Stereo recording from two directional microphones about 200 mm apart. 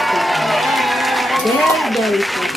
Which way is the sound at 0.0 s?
Centre (ahead or behind).